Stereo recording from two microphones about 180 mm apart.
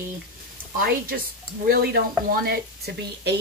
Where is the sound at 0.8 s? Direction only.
55° right (ahead or behind).